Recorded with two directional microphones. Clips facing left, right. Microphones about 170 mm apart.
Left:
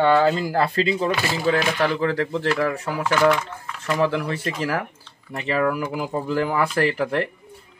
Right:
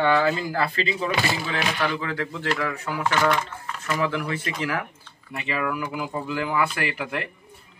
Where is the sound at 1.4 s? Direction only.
40° left (ahead or behind).